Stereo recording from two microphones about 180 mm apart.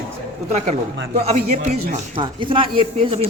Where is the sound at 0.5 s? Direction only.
40° right (ahead or behind).